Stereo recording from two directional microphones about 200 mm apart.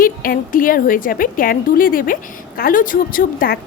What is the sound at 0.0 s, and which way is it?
A woman's voice, 45° left (ahead or behind).